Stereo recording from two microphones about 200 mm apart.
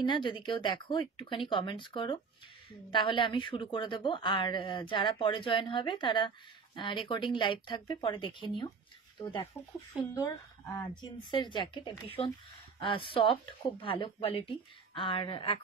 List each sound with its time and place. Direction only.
0.0 s a woman's voice: 25° left (ahead or behind)
9.9 s speech: 5° right (ahead or behind)
10.8 s a woman's voice: 25° left (ahead or behind)